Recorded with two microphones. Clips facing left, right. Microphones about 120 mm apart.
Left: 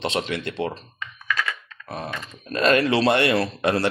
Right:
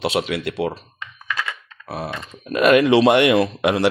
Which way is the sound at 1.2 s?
25° right (ahead or behind).